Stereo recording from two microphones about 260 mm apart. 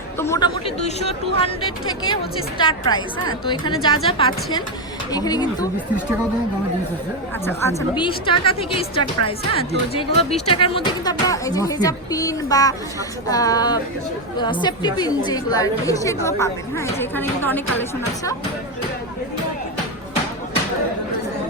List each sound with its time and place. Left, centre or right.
0.2 s a woman's voice: centre
2.6 s a woman's voice: centre
7.4 s a woman's voice: centre